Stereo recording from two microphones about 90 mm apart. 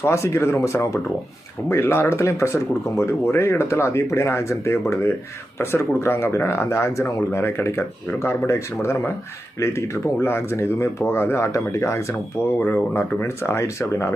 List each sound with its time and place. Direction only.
0.0 s speech: 30° left (ahead or behind)
12.5 s speech: 20° left (ahead or behind)